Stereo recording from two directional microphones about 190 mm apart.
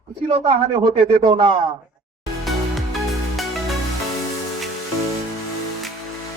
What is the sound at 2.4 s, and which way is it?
Music, centre (ahead or behind).